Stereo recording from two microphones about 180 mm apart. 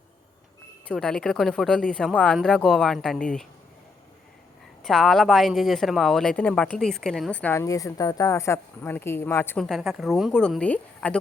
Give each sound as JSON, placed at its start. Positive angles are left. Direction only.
{"t": 0.9, "sound": "speech", "side_deg": 5}
{"t": 4.8, "sound": "speech", "side_deg": 0}